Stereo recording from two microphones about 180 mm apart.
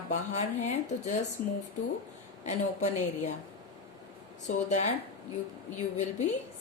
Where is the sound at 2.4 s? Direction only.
40° left (ahead or behind).